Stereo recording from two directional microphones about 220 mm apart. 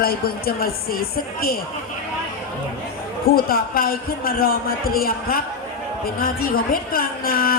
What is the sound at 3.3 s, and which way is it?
A man's voice, 45° left (ahead or behind).